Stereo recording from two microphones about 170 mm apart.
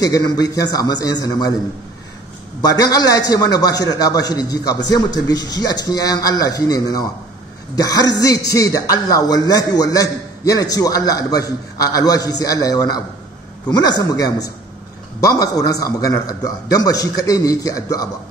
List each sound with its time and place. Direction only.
0.0 s a man's voice: 20° left (ahead or behind)
2.6 s a man's voice: 20° left (ahead or behind)